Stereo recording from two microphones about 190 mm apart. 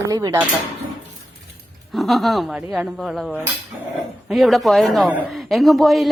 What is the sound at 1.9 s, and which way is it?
A woman's voice, centre (ahead or behind).